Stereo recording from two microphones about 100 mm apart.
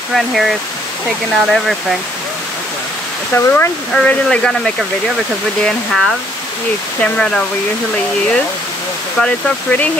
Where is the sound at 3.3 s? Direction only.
25° left (ahead or behind).